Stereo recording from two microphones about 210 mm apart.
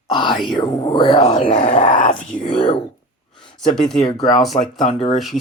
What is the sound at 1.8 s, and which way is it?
Speech, 40° left (ahead or behind).